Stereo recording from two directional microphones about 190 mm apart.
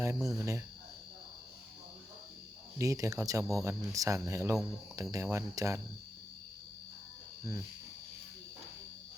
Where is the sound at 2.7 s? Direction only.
15° right (ahead or behind).